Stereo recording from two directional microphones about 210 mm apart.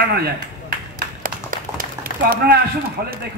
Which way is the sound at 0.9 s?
40° right (ahead or behind).